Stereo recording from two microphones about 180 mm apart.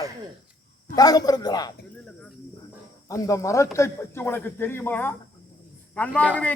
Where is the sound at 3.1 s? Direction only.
15° left (ahead or behind).